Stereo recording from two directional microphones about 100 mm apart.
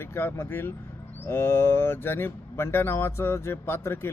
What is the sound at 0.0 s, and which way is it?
Speech, 20° left (ahead or behind).